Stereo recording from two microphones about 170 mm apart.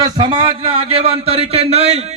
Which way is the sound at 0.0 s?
25° right (ahead or behind).